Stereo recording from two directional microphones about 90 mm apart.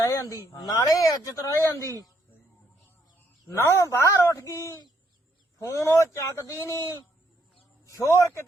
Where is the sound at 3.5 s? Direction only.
35° left (ahead or behind).